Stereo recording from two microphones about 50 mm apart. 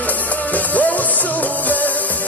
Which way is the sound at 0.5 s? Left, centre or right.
Left.